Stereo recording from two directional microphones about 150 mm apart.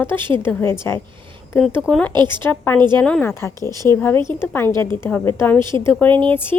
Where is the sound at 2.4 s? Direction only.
15° left (ahead or behind).